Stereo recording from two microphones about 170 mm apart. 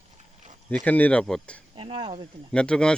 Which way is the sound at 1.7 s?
30° right (ahead or behind).